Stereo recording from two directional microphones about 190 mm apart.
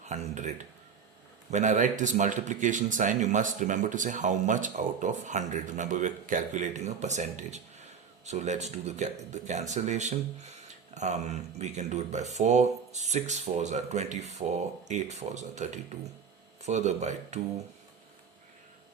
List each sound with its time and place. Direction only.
0.0 s a man's voice: 40° right (ahead or behind)